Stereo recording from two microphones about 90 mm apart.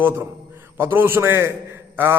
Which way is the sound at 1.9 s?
25° right (ahead or behind).